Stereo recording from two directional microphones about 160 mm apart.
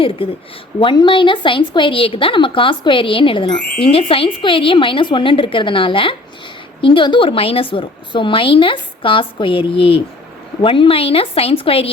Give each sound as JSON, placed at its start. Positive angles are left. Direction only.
{"t": 0.2, "sound": "a woman's voice", "side_deg": 35}